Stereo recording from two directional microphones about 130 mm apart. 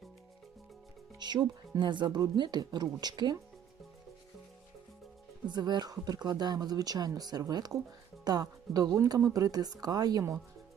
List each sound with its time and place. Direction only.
1.2 s speech: 35° right (ahead or behind)
5.5 s speech: 35° right (ahead or behind)